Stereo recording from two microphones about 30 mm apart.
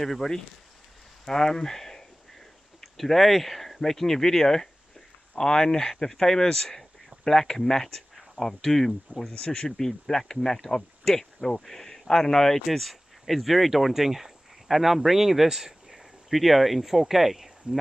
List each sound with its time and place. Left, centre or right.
0.0 s speech: centre
12.6 s speech: centre
15.4 s a sound: centre
16.3 s speech: centre